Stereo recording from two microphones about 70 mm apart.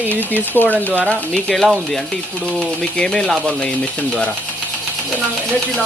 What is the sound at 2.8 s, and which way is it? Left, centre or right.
Speech, centre.